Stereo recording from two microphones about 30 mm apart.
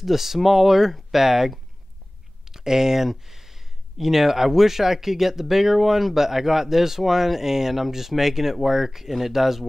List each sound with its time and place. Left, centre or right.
0.0 s speech: centre